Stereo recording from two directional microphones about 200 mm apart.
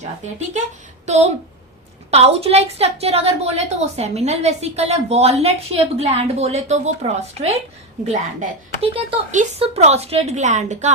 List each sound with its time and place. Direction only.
1.0 s a woman's voice: 35° right (ahead or behind)